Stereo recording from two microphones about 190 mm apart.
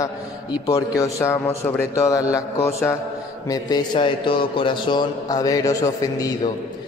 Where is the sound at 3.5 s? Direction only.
20° left (ahead or behind).